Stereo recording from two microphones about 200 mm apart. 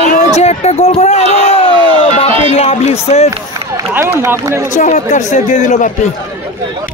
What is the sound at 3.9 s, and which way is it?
Speech, 10° right (ahead or behind).